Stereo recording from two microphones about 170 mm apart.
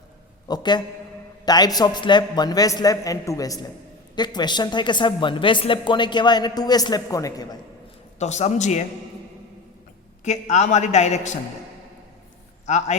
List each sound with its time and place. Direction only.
0.4 s speech: 25° left (ahead or behind)
8.2 s a man's voice: 40° left (ahead or behind)
10.2 s a man's voice: 40° left (ahead or behind)
12.6 s a man's voice: 40° left (ahead or behind)